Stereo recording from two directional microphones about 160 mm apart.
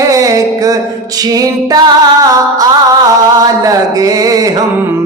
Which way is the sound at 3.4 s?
20° right (ahead or behind).